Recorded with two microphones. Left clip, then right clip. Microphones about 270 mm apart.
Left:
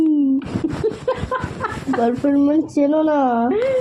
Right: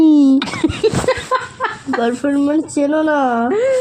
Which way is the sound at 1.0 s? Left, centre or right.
Centre.